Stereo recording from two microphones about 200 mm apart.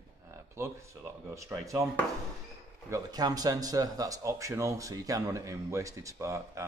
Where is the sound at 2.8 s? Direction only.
15° right (ahead or behind).